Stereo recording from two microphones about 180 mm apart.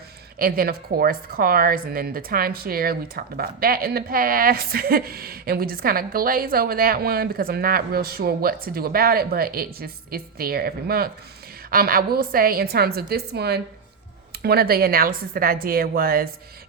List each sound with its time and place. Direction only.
0.3 s a woman's voice: 55° right (ahead or behind)